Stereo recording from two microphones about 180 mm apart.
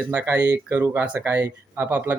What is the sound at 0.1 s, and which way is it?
Speech, 10° right (ahead or behind).